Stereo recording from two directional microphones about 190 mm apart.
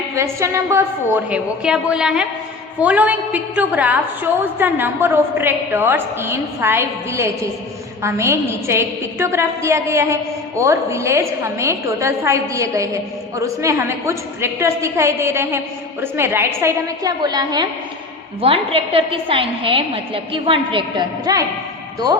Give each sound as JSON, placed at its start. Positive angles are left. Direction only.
{"t": 0.2, "sound": "a woman's voice", "side_deg": -15}